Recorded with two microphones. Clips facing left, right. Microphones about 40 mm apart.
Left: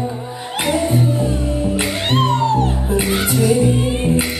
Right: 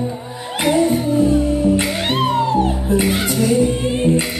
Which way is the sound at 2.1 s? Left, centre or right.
Centre.